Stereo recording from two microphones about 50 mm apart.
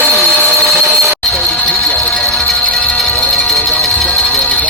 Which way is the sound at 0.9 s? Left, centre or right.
Centre.